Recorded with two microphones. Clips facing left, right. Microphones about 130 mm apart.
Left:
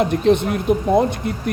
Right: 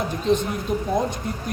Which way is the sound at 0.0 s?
65° left (ahead or behind).